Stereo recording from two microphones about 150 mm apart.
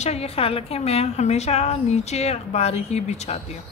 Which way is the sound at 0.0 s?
45° left (ahead or behind).